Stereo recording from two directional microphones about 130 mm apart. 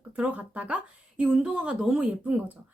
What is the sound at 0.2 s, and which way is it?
Speech, 10° right (ahead or behind).